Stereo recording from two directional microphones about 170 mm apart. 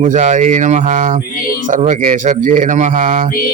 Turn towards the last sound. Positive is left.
turn(degrees=-50)  # may be behind; listen again after turning